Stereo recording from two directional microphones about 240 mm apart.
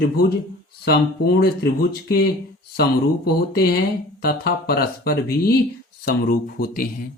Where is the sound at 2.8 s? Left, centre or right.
Left.